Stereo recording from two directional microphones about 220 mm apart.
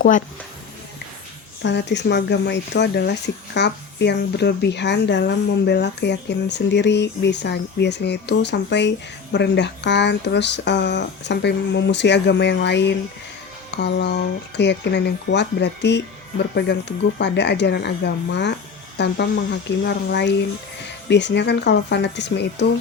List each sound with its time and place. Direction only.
1.6 s speech: 50° left (ahead or behind)
17.2 s speech: 50° left (ahead or behind)